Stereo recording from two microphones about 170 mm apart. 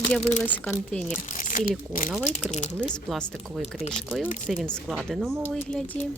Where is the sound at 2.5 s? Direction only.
45° left (ahead or behind).